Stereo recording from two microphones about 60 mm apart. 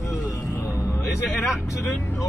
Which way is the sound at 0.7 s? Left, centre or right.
Left.